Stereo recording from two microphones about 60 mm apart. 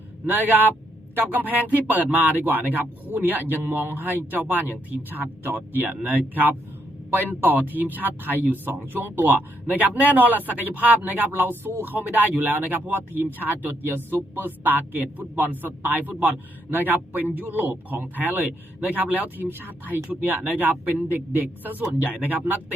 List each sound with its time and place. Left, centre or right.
0.3 s a man's voice: right